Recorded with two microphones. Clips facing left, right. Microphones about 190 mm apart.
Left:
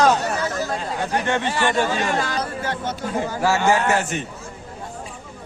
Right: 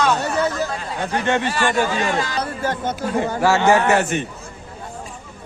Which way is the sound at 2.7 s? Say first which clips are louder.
Right 3 dB; 60° right (ahead or behind).